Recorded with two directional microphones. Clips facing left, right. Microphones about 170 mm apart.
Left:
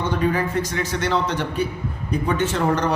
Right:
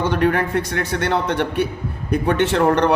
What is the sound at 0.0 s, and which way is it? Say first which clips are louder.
A man's voice: right 3 dB; 80° right.